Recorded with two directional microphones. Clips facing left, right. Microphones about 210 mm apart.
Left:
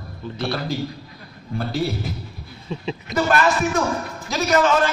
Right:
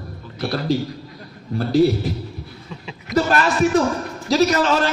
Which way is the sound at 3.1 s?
25° left (ahead or behind).